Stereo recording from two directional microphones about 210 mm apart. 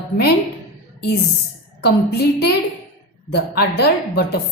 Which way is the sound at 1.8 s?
50° left (ahead or behind).